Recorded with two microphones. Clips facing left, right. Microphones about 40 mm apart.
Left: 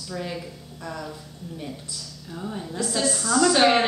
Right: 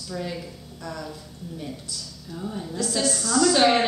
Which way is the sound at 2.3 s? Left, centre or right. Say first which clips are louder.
Even; centre.